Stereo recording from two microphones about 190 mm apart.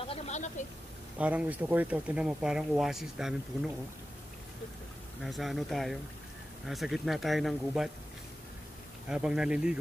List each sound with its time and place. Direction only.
0.0 s a sound: 30° left (ahead or behind)
1.1 s speech: 5° right (ahead or behind)
5.2 s speech: centre (ahead or behind)
9.1 s speech: 5° right (ahead or behind)